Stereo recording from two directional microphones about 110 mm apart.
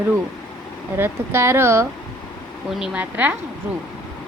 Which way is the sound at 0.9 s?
20° right (ahead or behind).